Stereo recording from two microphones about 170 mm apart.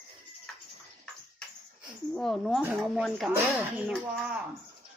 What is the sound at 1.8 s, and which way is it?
Speech, centre (ahead or behind).